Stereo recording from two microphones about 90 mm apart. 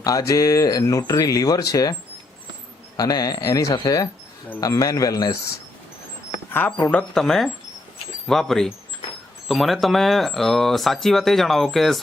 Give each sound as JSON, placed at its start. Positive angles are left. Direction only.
{"t": 0.0, "sound": "speech", "side_deg": 40}
{"t": 3.0, "sound": "speech", "side_deg": 45}
{"t": 6.9, "sound": "speech", "side_deg": 5}